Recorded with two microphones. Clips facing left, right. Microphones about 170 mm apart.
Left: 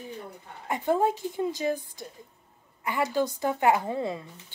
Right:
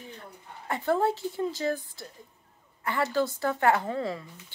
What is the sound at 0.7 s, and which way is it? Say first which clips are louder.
A woman's voice: left 1 dB; 15° left (ahead or behind).